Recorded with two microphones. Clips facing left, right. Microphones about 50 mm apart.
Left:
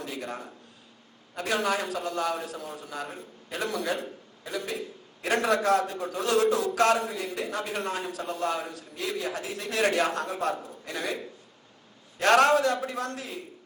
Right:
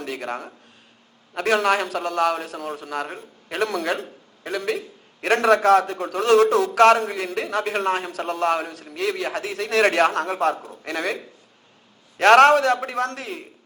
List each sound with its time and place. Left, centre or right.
0.0 s a man's voice: right